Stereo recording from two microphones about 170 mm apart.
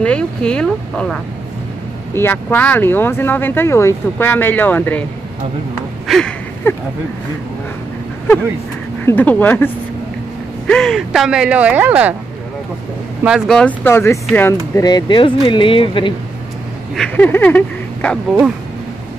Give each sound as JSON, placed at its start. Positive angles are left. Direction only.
{"t": 0.0, "sound": "speech", "side_deg": 5}
{"t": 6.0, "sound": "a sound", "side_deg": 5}
{"t": 6.7, "sound": "speech", "side_deg": 15}
{"t": 9.0, "sound": "speech", "side_deg": 10}
{"t": 10.7, "sound": "speech", "side_deg": 0}
{"t": 13.2, "sound": "speech", "side_deg": 0}
{"t": 14.9, "sound": "speech", "side_deg": 25}
{"t": 16.9, "sound": "speech", "side_deg": 5}